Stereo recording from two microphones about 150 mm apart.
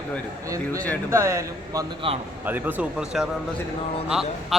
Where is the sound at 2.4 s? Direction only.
10° right (ahead or behind).